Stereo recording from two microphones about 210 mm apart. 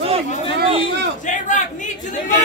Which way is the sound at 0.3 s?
30° left (ahead or behind).